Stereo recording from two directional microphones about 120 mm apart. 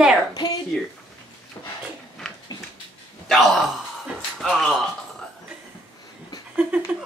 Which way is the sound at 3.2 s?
Centre (ahead or behind).